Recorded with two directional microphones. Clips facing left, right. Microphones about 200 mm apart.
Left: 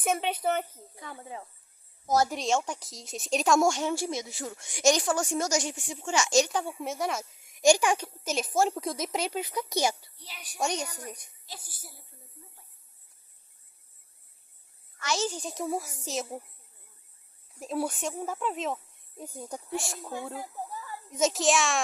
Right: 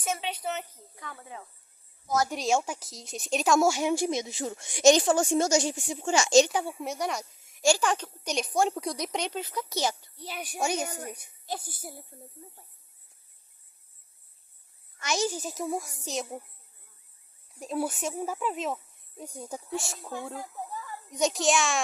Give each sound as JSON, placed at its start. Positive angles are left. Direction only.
{"t": 0.0, "sound": "speech", "side_deg": 55}
{"t": 0.9, "sound": "speech", "side_deg": 30}
{"t": 2.3, "sound": "a woman's voice", "side_deg": -5}
{"t": 6.5, "sound": "speech", "side_deg": -5}
{"t": 7.3, "sound": "a woman's voice", "side_deg": 15}
{"t": 10.2, "sound": "a woman's voice", "side_deg": -50}
{"t": 10.6, "sound": "speech", "side_deg": -5}
{"t": 11.4, "sound": "a woman's voice", "side_deg": -55}
{"t": 14.9, "sound": "speech", "side_deg": -15}
{"t": 17.5, "sound": "speech", "side_deg": 0}